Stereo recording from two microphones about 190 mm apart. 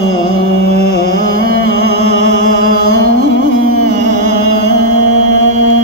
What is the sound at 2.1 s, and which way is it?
Music, 90° left.